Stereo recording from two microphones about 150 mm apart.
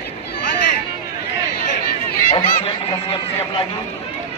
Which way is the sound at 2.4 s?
35° left (ahead or behind).